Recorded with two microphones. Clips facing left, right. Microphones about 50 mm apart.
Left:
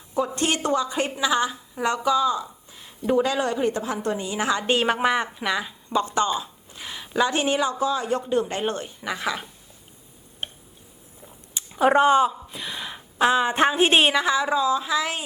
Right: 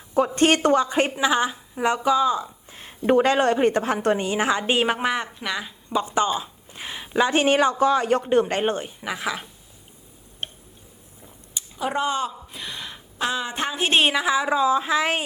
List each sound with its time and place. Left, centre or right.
0.1 s a woman's voice: right
2.6 s a woman's voice: right
4.3 s a woman's voice: right
4.9 s speech: centre
6.1 s a sound: right
7.0 s a sound: centre
7.3 s a woman's voice: right
8.6 s a woman's voice: right
9.0 s a woman's voice: centre
11.8 s speech: left
12.5 s a woman's voice: centre; by 13.9 s left
13.9 s speech: centre
14.5 s a woman's voice: right